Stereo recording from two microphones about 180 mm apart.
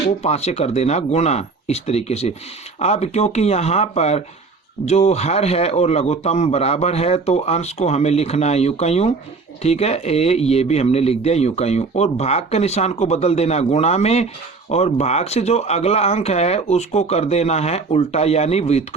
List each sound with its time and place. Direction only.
0.2 s speech: 35° left (ahead or behind)